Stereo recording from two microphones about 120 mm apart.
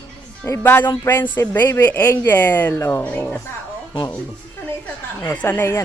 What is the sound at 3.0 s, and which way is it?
Speech, 15° left (ahead or behind).